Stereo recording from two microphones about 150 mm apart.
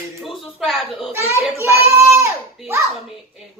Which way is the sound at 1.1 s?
15° right (ahead or behind).